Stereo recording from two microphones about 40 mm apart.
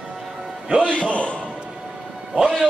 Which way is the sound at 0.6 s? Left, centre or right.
Right.